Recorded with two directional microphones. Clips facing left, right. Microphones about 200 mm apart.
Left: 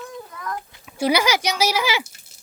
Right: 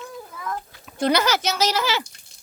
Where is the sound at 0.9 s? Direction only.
10° left (ahead or behind).